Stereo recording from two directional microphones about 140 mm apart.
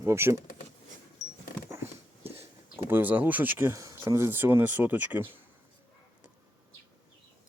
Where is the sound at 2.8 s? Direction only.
15° right (ahead or behind).